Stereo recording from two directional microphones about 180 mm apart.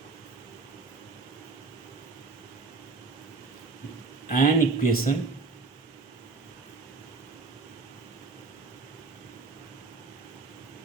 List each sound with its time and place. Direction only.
4.3 s speech: 50° left (ahead or behind)